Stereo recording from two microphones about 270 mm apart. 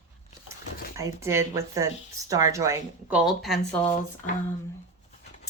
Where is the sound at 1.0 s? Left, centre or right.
Centre.